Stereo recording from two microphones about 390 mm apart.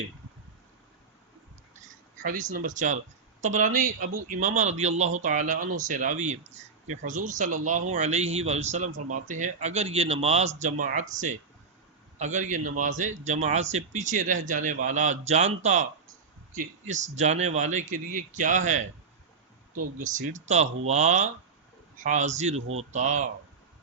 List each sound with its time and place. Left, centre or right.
2.2 s speech: right
20.0 s speech: centre